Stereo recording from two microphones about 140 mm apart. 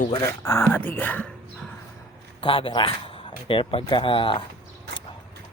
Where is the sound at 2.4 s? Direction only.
40° left (ahead or behind).